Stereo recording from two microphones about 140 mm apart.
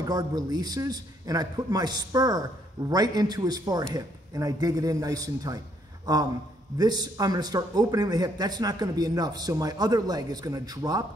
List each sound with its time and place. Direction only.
0.1 s a man's voice: 30° right (ahead or behind)